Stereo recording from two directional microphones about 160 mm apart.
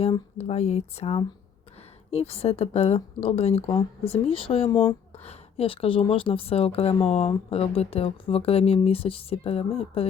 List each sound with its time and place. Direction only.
0.3 s speech: 45° left (ahead or behind)
4.7 s speech: 15° left (ahead or behind)
5.2 s speech: 40° left (ahead or behind)